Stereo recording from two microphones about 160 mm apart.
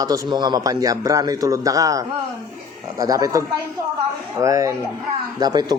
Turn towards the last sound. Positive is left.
turn(degrees=-25)  # may be behind; listen again after turning